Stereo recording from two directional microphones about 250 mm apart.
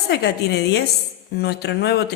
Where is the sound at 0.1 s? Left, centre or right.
Left.